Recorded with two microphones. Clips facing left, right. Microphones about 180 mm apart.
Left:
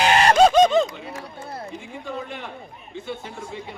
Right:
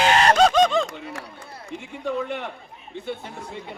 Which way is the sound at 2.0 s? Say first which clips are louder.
Right 7 dB; 65° right (ahead or behind).